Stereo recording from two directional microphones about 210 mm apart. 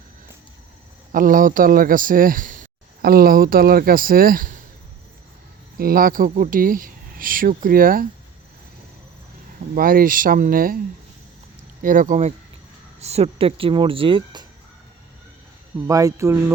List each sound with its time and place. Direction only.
1.1 s speech: 40° right (ahead or behind)
5.7 s speech: 45° right (ahead or behind)
9.7 s speech: 45° right (ahead or behind)
11.8 s speech: 40° right (ahead or behind)
15.9 s speech: 15° right (ahead or behind)